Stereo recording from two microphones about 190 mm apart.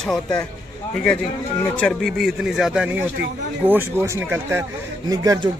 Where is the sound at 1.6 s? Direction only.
10° left (ahead or behind).